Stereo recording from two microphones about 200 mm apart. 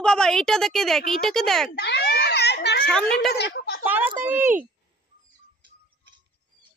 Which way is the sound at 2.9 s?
5° left (ahead or behind).